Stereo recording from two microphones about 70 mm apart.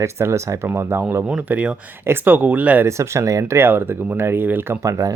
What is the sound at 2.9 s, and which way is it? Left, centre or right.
Speech, right.